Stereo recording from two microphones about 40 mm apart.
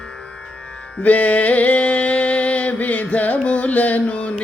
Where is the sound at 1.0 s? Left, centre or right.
Left.